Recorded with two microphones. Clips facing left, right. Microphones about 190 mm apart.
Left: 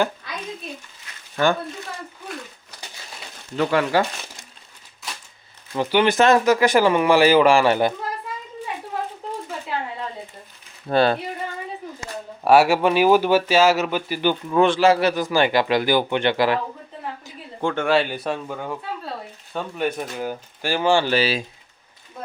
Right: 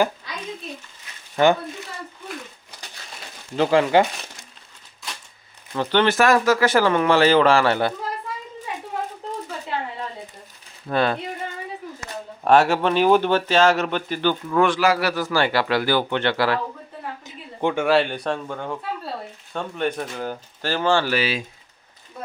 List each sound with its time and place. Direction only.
3.6 s speech: 30° right (ahead or behind)
5.7 s speech: 15° left (ahead or behind)
10.8 s speech: 30° left (ahead or behind)
12.5 s speech: 10° left (ahead or behind)
17.2 s a sound: 20° right (ahead or behind)
17.7 s speech: centre (ahead or behind)
21.1 s speech: 30° left (ahead or behind)